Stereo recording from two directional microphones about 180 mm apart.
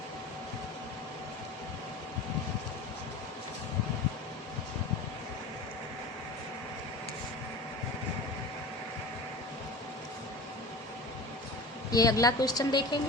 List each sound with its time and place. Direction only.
11.9 s a woman's voice: 20° left (ahead or behind)